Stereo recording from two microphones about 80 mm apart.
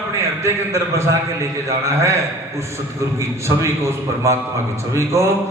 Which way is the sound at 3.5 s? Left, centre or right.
Right.